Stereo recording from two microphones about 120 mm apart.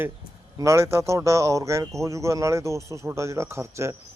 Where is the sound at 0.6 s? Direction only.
25° right (ahead or behind).